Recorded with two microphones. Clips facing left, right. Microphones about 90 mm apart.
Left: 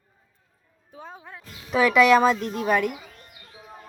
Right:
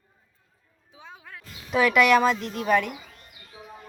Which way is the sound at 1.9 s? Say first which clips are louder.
Left 3 dB; 25° left (ahead or behind).